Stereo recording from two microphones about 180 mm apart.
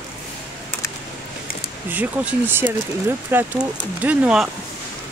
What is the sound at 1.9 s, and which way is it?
Speech, 10° right (ahead or behind).